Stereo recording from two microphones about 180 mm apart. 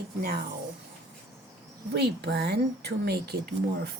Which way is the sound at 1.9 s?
65° right (ahead or behind).